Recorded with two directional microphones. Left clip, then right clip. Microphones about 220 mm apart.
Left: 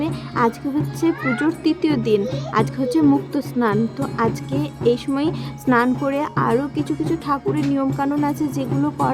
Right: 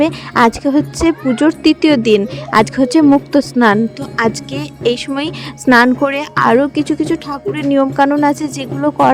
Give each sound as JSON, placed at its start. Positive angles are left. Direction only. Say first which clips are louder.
{"t": 0.0, "sound": "speech", "louder": "right 9 dB", "side_deg": -30}